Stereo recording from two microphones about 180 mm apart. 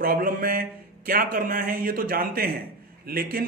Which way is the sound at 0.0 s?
55° right (ahead or behind).